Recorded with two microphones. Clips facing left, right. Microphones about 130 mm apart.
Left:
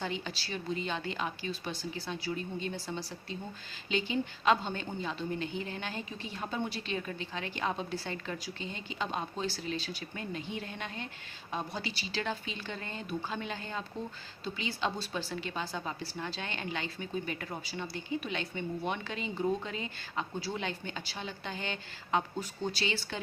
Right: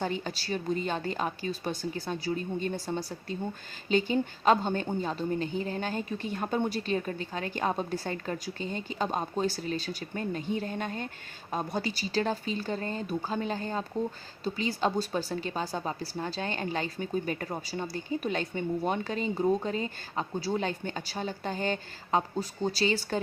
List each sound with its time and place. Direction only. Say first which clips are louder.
0.0 s a woman's voice: right 5 dB; 45° right (ahead or behind)